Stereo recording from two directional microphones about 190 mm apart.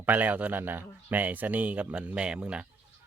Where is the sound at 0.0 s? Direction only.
10° right (ahead or behind).